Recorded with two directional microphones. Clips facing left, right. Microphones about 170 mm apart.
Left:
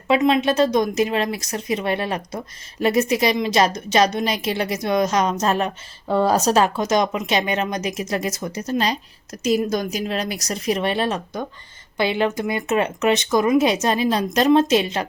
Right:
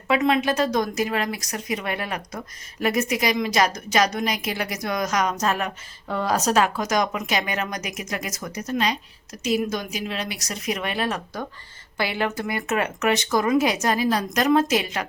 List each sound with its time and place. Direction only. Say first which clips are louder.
0.1 s a woman's voice: left 3 dB; 20° left (ahead or behind)